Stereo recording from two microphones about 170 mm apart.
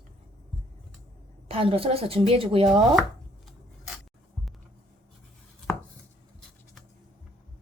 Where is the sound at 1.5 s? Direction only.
35° right (ahead or behind).